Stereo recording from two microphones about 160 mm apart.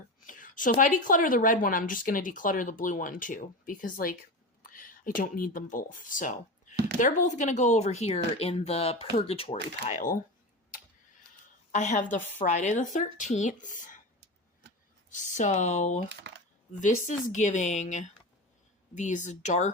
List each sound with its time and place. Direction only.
0.3 s a woman's voice: 55° left (ahead or behind); by 9.6 s 35° left (ahead or behind)
11.7 s a woman's voice: 50° left (ahead or behind)
15.4 s a woman's voice: 45° left (ahead or behind)
16.0 s speech: 90° right
16.8 s a woman's voice: 50° left (ahead or behind)